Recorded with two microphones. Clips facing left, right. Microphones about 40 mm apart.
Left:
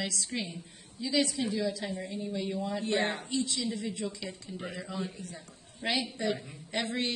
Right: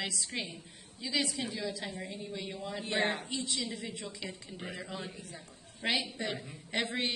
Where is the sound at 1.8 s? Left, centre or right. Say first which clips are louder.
Left 4 dB; right.